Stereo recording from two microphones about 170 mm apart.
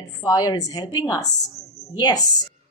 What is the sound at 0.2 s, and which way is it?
A woman's voice, 20° left (ahead or behind).